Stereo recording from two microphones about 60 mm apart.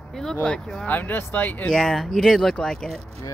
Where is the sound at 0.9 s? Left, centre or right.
Left.